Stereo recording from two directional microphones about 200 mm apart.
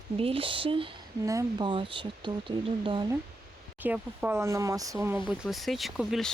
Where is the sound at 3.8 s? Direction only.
10° right (ahead or behind).